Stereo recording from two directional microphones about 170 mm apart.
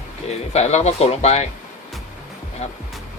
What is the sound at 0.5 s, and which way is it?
Speech, 40° left (ahead or behind).